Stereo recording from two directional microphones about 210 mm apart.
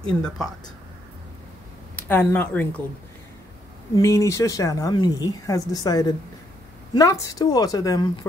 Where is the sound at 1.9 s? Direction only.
10° left (ahead or behind).